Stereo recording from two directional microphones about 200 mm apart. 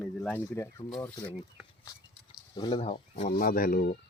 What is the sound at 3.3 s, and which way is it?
Speech, 45° left (ahead or behind).